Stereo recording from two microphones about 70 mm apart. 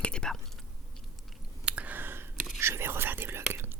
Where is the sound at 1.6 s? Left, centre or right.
Centre.